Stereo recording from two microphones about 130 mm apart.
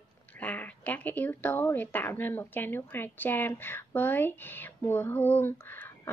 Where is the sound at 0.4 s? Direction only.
15° left (ahead or behind).